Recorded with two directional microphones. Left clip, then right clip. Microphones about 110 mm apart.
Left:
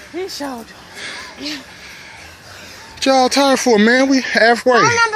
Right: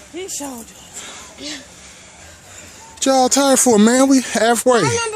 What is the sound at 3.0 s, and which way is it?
Speech, 45° right (ahead or behind).